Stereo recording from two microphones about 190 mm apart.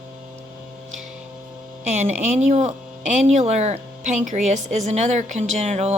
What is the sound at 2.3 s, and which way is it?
A woman's voice, 35° right (ahead or behind).